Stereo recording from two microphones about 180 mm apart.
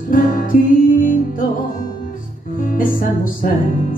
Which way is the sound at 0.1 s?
50° left (ahead or behind).